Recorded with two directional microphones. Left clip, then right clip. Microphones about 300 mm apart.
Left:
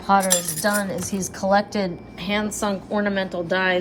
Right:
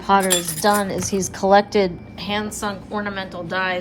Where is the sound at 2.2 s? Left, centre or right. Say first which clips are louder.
Even; centre.